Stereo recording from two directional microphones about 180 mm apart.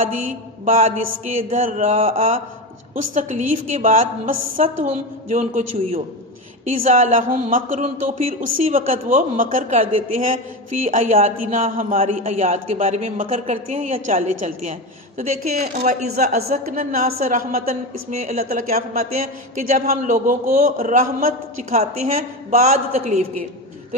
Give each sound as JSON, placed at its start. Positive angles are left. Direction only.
{"t": 0.0, "sound": "a woman's voice", "side_deg": -45}
{"t": 11.9, "sound": "a woman's voice", "side_deg": -35}
{"t": 18.2, "sound": "a woman's voice", "side_deg": -40}